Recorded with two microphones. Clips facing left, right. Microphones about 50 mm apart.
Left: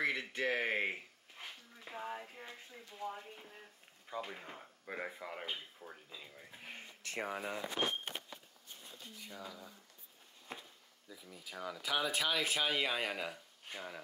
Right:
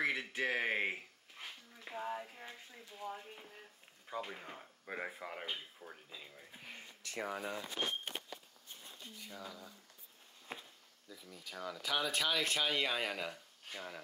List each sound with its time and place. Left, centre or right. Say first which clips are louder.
0.0 s a sound: even; centre
4.1 s speech: even; centre
6.6 s a sound: left 2 dB; left
9.3 s speech: left 1 dB; centre
10.5 s speech: right 1 dB; right
11.1 s speech: even; centre